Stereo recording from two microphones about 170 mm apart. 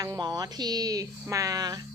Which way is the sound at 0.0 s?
20° right (ahead or behind).